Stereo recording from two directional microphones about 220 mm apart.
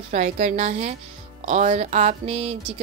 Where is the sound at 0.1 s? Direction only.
30° right (ahead or behind).